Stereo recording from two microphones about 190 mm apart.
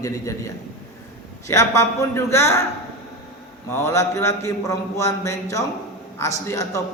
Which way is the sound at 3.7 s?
15° left (ahead or behind).